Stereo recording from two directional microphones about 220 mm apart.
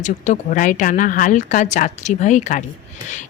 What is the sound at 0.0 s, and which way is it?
A woman's voice, 35° left (ahead or behind).